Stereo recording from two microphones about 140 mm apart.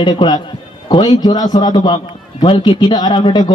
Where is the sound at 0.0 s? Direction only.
30° left (ahead or behind).